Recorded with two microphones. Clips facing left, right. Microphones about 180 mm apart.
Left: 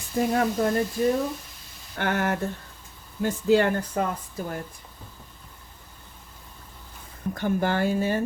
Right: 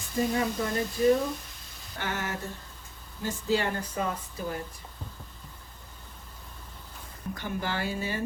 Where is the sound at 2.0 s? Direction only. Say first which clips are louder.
Left 8 dB; 60° left (ahead or behind).